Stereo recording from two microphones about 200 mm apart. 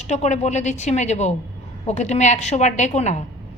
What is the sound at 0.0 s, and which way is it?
A woman's voice, 35° left (ahead or behind).